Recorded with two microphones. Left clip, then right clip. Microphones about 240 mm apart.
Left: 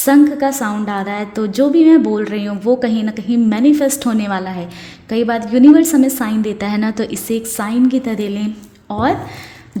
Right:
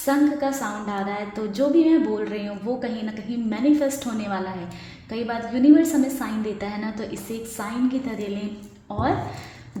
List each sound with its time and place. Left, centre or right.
0.0 s a woman's voice: left